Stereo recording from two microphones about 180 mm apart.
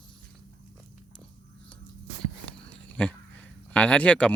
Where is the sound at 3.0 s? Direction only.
5° left (ahead or behind).